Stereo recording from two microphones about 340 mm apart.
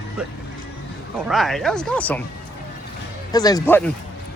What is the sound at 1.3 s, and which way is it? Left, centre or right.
Speech, centre.